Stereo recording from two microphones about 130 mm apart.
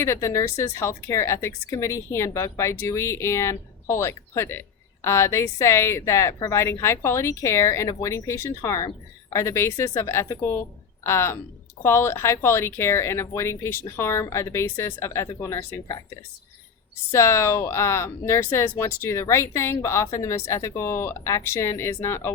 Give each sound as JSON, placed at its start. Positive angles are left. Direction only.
{"t": 0.0, "sound": "speech", "side_deg": 20}